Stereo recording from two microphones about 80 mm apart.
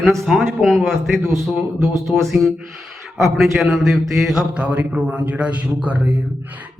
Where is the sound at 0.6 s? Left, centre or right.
Centre.